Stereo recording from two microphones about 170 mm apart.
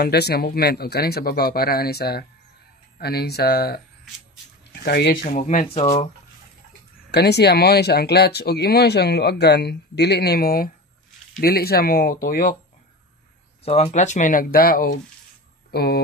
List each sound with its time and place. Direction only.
0.0 s speech: 70° left (ahead or behind)
4.8 s speech: 70° left (ahead or behind); by 6.0 s 40° left (ahead or behind)
7.1 s speech: 75° left (ahead or behind); by 12.5 s 55° left (ahead or behind)
13.7 s speech: 35° left (ahead or behind); by 15.0 s 60° left (ahead or behind)
15.7 s speech: 70° left (ahead or behind)